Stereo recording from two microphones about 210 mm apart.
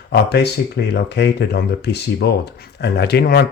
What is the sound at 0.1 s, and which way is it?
Speech, 55° left (ahead or behind).